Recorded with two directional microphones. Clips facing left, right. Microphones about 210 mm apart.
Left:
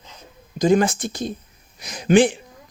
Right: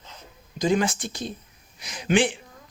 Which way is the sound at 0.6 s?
45° left (ahead or behind).